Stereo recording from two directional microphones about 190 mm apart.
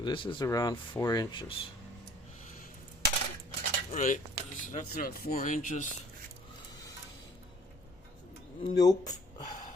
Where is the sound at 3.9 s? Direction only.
35° left (ahead or behind).